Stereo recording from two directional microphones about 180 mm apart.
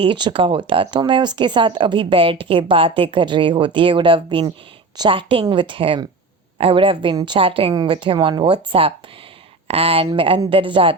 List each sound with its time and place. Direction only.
0.0 s speech: 25° right (ahead or behind)